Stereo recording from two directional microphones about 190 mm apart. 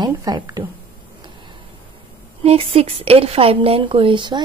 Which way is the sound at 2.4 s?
30° right (ahead or behind).